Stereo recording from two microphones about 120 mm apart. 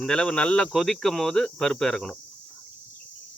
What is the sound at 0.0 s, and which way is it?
Speech, 5° left (ahead or behind).